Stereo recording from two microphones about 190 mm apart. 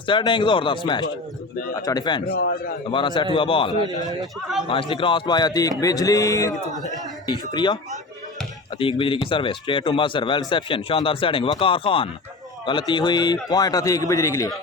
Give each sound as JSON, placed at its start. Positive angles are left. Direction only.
{"t": 0.0, "sound": "a man's voice", "side_deg": 25}
{"t": 2.2, "sound": "a man's voice", "side_deg": 50}
{"t": 2.9, "sound": "a man's voice", "side_deg": 25}
{"t": 8.8, "sound": "a man's voice", "side_deg": 25}